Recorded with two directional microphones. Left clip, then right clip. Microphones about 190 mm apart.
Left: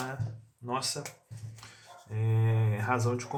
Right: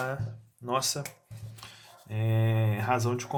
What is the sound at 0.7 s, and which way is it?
Speech, 35° right (ahead or behind).